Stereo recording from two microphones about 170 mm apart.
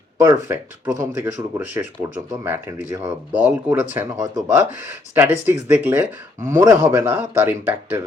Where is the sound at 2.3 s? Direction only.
10° right (ahead or behind).